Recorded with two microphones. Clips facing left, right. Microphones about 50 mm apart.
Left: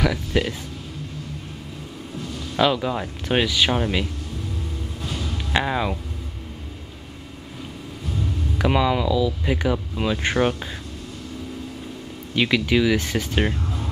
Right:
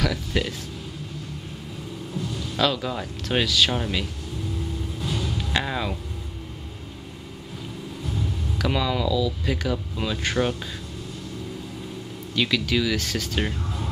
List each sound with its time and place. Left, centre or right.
0.0 s speech: centre
2.5 s speech: centre
5.5 s speech: centre
8.5 s speech: left
12.4 s speech: left